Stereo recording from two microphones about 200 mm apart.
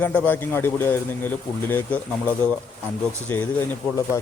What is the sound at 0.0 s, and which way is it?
Speech, 5° left (ahead or behind).